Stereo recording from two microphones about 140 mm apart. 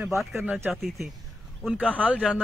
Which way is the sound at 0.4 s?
15° right (ahead or behind).